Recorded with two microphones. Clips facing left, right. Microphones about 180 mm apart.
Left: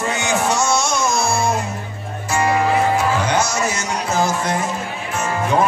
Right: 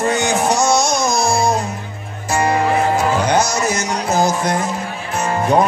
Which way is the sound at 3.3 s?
40° right (ahead or behind).